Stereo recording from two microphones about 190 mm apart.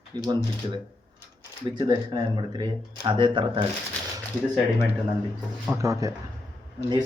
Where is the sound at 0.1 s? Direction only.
25° right (ahead or behind).